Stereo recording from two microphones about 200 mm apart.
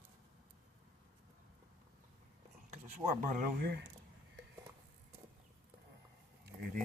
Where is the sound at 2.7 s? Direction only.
40° right (ahead or behind).